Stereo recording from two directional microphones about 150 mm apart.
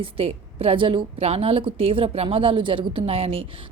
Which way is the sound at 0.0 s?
40° right (ahead or behind).